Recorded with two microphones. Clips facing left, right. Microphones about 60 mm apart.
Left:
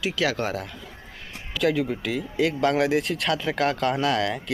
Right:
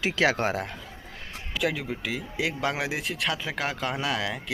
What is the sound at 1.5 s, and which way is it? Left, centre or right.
Speech, centre.